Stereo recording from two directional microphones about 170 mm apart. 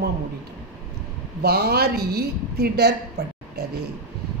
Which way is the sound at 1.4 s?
70° right (ahead or behind).